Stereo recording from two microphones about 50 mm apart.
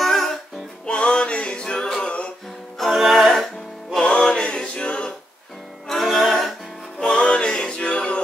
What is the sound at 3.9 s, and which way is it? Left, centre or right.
Music, centre.